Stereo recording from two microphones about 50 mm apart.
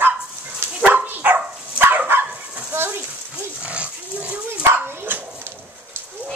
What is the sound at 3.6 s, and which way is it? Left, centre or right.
Pig, right.